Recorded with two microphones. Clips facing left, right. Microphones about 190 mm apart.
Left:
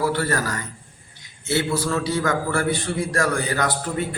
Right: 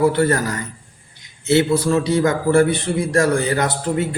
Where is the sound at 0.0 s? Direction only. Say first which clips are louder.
Right 6 dB; 20° right (ahead or behind).